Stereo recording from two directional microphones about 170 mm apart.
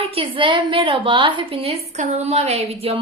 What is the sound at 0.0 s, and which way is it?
A woman's voice, 35° right (ahead or behind).